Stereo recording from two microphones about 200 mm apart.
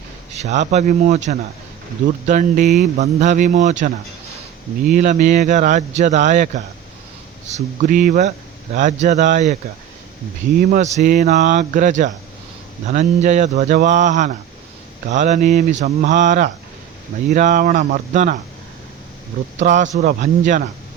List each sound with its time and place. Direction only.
0.3 s speech: 35° right (ahead or behind)
10.6 s speech: 40° right (ahead or behind)
19.5 s speech: 40° right (ahead or behind)
20.0 s speech: 50° right (ahead or behind)